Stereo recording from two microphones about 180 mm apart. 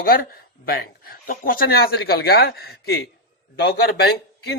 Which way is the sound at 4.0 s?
60° left (ahead or behind).